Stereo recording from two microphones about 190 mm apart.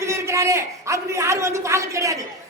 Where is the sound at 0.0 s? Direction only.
15° right (ahead or behind).